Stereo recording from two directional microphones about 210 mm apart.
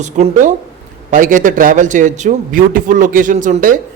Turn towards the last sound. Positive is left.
turn(degrees=-35)  # may be behind; listen again after turning